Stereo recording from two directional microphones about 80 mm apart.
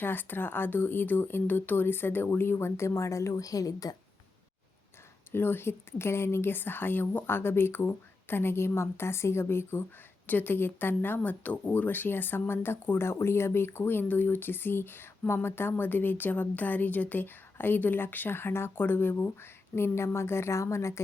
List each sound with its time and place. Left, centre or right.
0.0 s speech: left
5.3 s speech: left